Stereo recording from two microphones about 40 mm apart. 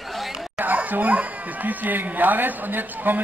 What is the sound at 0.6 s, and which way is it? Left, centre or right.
Speech, right.